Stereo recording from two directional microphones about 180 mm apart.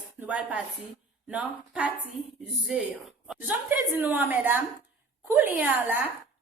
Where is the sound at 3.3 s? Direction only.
10° right (ahead or behind).